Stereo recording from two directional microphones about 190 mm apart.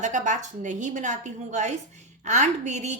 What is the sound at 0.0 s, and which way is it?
A woman's voice, 40° right (ahead or behind).